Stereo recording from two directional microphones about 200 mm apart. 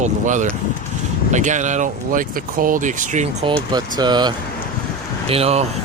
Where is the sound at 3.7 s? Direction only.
20° right (ahead or behind).